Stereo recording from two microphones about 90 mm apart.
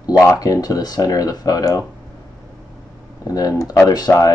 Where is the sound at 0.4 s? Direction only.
45° left (ahead or behind).